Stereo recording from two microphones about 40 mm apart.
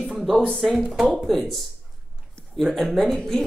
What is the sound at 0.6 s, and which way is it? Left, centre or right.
Speech, centre.